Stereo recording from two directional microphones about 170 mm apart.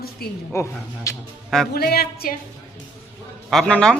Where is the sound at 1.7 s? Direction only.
65° left (ahead or behind).